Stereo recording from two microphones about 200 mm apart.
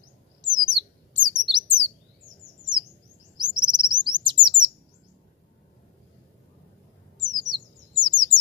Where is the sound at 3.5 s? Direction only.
25° right (ahead or behind).